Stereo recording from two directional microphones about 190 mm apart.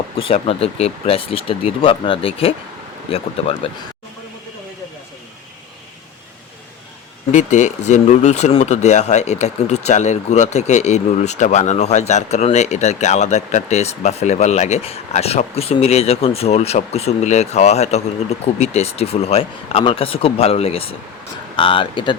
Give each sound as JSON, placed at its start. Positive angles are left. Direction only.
{"t": 0.2, "sound": "speech", "side_deg": 30}
{"t": 7.3, "sound": "speech", "side_deg": 40}